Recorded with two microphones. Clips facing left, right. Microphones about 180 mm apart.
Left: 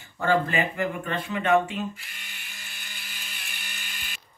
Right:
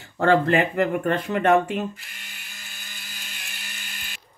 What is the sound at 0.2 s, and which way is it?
Speech, 60° right (ahead or behind).